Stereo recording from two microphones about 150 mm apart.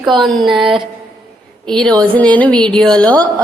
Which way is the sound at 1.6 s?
5° left (ahead or behind).